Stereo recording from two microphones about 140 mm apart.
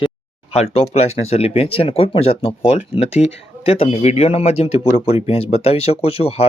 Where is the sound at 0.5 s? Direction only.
45° left (ahead or behind).